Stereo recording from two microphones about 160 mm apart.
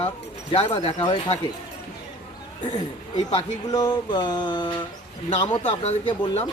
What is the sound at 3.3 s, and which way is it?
Speech, 30° left (ahead or behind).